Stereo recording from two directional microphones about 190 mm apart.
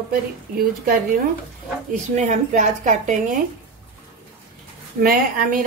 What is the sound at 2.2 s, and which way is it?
A woman's voice, 40° right (ahead or behind).